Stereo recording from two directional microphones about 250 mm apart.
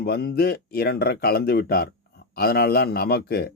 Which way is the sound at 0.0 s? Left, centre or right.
Left.